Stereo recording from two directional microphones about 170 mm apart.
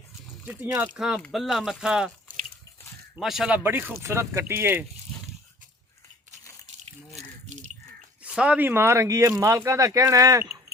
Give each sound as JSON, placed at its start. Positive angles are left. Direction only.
{"t": 0.4, "sound": "speech", "side_deg": -5}
{"t": 3.2, "sound": "speech", "side_deg": 0}
{"t": 7.4, "sound": "a sound", "side_deg": -45}
{"t": 8.2, "sound": "speech", "side_deg": -5}